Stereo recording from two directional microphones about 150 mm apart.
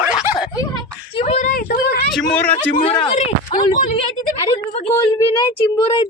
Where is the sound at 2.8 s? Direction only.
45° left (ahead or behind).